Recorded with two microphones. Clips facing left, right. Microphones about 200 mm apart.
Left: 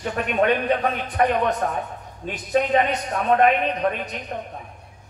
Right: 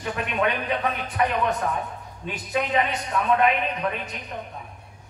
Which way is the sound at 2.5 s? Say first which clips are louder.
Left 5 dB; 40° left (ahead or behind).